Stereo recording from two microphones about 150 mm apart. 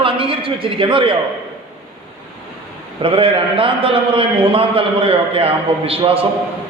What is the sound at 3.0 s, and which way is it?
A man's voice, 35° right (ahead or behind).